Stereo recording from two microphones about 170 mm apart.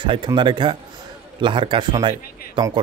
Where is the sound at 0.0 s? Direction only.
30° right (ahead or behind).